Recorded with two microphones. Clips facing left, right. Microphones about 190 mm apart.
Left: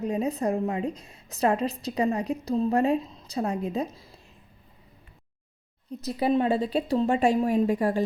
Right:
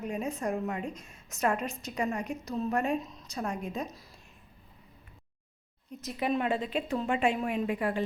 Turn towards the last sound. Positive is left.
turn(degrees=40)  # may be behind; listen again after turning